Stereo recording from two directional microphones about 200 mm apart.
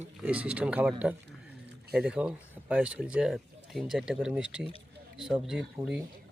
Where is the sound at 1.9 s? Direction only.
5° right (ahead or behind).